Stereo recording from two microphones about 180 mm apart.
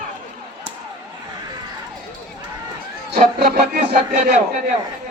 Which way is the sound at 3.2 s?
55° right (ahead or behind).